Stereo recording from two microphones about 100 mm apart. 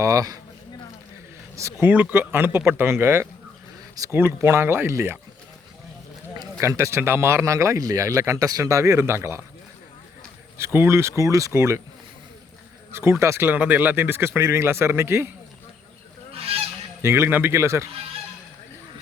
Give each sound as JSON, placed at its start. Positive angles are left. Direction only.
{"t": 0.0, "sound": "speech", "side_deg": -35}
{"t": 1.5, "sound": "speech", "side_deg": -30}
{"t": 1.9, "sound": "speech", "side_deg": -15}
{"t": 6.6, "sound": "speech", "side_deg": -30}
{"t": 10.6, "sound": "speech", "side_deg": -25}
{"t": 12.9, "sound": "speech", "side_deg": -25}
{"t": 16.3, "sound": "honk", "side_deg": -75}
{"t": 17.0, "sound": "speech", "side_deg": -25}